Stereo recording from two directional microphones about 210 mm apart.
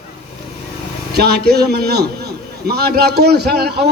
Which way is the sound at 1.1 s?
50° right (ahead or behind).